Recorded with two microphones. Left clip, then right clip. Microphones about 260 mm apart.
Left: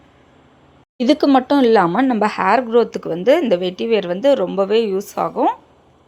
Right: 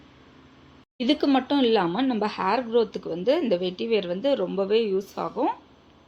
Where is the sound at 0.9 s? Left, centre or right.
Left.